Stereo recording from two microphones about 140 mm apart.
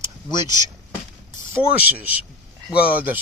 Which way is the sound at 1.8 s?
10° right (ahead or behind).